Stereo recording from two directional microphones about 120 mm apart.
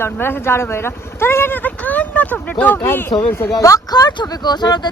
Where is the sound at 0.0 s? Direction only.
20° left (ahead or behind).